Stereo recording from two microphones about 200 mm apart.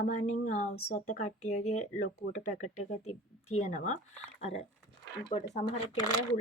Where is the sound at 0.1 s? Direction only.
35° left (ahead or behind).